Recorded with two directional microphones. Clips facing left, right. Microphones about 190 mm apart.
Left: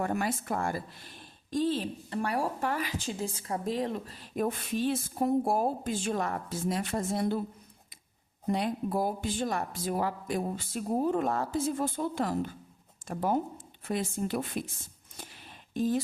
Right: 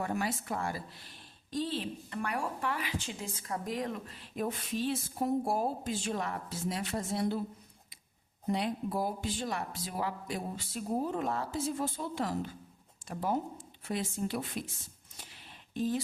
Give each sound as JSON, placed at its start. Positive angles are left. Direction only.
{"t": 0.0, "sound": "a woman's voice", "side_deg": 50}
{"t": 8.5, "sound": "a woman's voice", "side_deg": 50}
{"t": 15.2, "sound": "a sound", "side_deg": 45}